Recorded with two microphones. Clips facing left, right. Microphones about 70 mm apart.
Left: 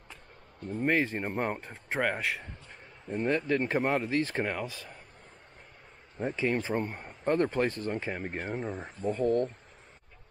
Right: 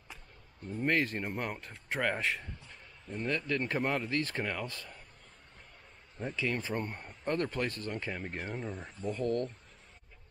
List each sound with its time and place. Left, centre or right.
0.8 s speech: centre
2.0 s a man's voice: centre
3.2 s speech: left
4.6 s speech: centre
6.1 s speech: left
6.7 s speech: centre
7.1 s speech: left
8.4 s speech: centre